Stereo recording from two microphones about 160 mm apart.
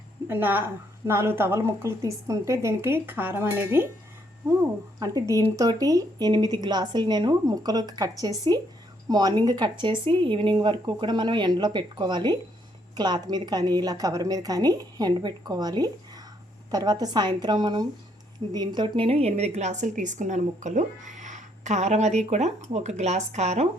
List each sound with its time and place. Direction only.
0.3 s a woman's voice: 10° right (ahead or behind)
4.9 s a woman's voice: 20° right (ahead or behind); by 23.6 s 45° right (ahead or behind)